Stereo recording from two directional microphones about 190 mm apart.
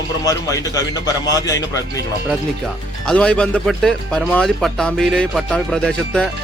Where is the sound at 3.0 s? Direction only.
5° left (ahead or behind).